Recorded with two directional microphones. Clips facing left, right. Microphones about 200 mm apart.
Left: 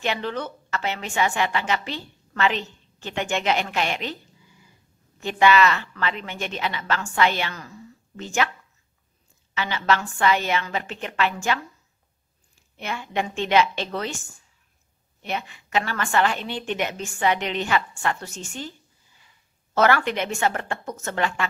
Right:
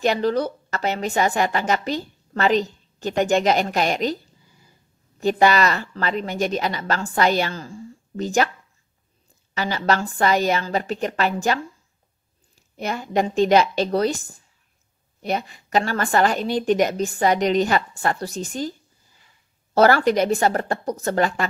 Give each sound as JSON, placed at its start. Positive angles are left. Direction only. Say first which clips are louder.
{"t": 0.0, "sound": "a woman's voice", "louder": "right 7 dB", "side_deg": -40}
{"t": 9.5, "sound": "a woman's voice", "louder": "right 2 dB", "side_deg": -40}
{"t": 12.7, "sound": "a woman's voice", "louder": "right 5 dB", "side_deg": -40}